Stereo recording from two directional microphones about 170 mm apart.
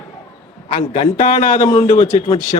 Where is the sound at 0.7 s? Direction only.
40° left (ahead or behind).